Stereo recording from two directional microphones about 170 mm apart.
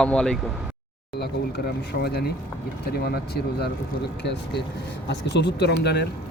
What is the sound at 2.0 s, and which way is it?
Speech, 65° left (ahead or behind).